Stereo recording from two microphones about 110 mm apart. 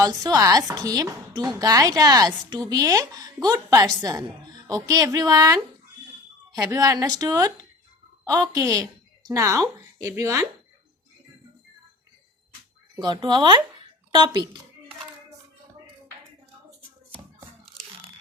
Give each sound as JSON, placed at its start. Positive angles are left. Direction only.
{"t": 0.0, "sound": "a woman's voice", "side_deg": -35}
{"t": 13.0, "sound": "speech", "side_deg": -40}